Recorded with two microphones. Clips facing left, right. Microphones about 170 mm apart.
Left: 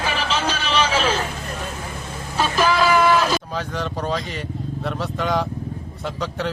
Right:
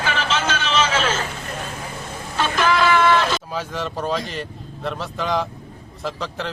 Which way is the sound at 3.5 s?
Centre (ahead or behind).